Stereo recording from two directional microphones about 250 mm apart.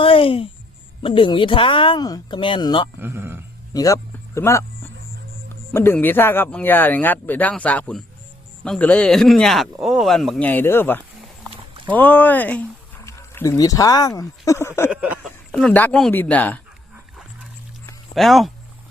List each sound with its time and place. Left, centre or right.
0.0 s a sound: left
1.0 s speech: centre
3.0 s speech: centre
3.7 s speech: centre
5.7 s speech: centre
14.8 s speech: centre
18.1 s speech: centre